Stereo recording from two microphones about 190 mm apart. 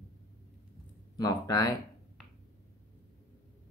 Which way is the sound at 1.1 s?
20° left (ahead or behind).